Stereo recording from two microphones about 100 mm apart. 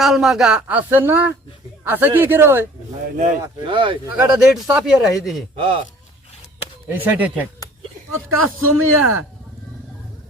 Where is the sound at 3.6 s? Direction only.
55° right (ahead or behind).